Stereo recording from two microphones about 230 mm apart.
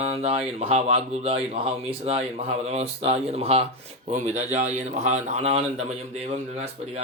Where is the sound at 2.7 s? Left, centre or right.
Right.